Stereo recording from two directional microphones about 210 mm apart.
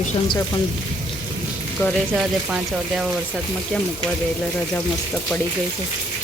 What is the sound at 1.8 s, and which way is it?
Speech, centre (ahead or behind).